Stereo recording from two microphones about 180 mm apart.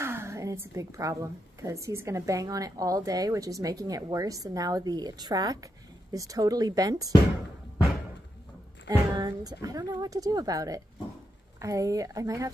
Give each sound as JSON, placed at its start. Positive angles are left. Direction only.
{"t": 0.0, "sound": "a woman's voice", "side_deg": -15}
{"t": 8.8, "sound": "a woman's voice", "side_deg": -20}